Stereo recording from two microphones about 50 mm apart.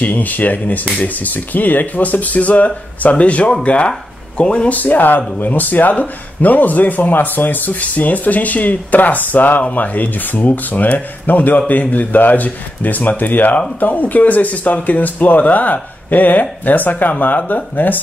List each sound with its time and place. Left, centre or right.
0.0 s speech: left
4.7 s speech: left